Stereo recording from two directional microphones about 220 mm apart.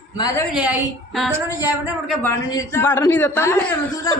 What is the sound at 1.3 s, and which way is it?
Speech, 10° right (ahead or behind).